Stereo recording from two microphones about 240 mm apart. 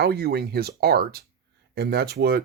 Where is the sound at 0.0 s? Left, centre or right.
Right.